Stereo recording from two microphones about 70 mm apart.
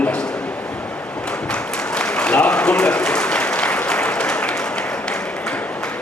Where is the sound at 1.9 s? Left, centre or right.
Centre.